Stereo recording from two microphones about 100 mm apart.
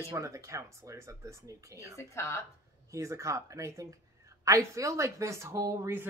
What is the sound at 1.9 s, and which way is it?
Speech, 30° left (ahead or behind).